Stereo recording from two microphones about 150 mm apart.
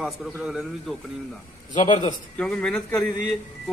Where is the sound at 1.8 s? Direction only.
55° left (ahead or behind).